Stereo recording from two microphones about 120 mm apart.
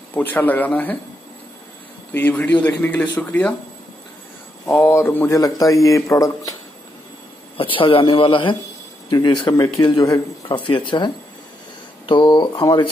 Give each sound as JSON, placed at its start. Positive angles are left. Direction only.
{"t": 0.1, "sound": "speech", "side_deg": 15}
{"t": 2.1, "sound": "speech", "side_deg": 15}
{"t": 4.6, "sound": "speech", "side_deg": 15}
{"t": 7.5, "sound": "speech", "side_deg": 45}
{"t": 12.1, "sound": "speech", "side_deg": 40}